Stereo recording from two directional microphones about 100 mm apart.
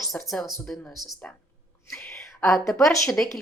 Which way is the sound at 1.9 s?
5° left (ahead or behind).